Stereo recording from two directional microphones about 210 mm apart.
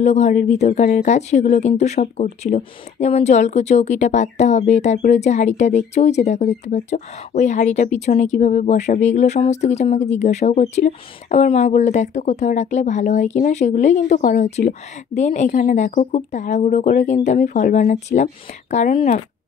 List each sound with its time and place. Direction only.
0.0 s speech: 35° left (ahead or behind)